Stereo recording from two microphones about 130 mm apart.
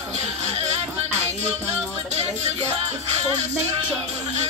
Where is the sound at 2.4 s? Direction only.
55° right (ahead or behind).